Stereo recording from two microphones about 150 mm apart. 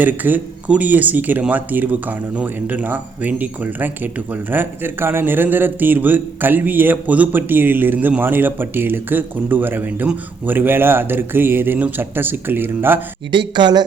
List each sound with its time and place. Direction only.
0.0 s speech: 10° right (ahead or behind)
13.3 s speech: 30° right (ahead or behind)